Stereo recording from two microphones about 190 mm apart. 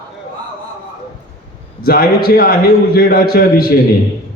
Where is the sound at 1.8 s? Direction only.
55° left (ahead or behind).